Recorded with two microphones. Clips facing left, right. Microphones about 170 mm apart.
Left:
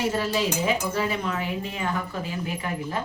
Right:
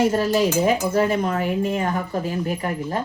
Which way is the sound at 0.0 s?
40° right (ahead or behind).